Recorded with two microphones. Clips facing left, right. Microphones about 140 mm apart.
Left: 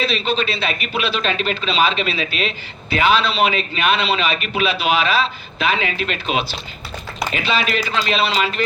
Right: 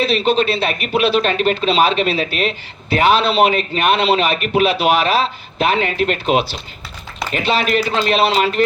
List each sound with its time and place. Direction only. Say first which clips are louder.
0.1 s a man's voice: right 6 dB; 55° right (ahead or behind)